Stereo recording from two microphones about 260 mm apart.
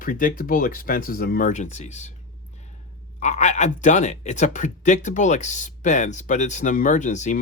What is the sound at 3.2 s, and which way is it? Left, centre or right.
Speech, left.